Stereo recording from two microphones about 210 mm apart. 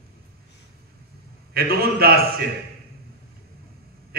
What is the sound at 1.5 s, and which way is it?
Speech, 50° right (ahead or behind).